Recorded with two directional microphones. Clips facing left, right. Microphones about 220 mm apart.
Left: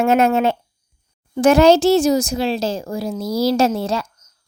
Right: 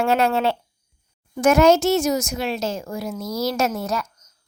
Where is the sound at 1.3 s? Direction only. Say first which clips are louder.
Left 3 dB; 30° left (ahead or behind).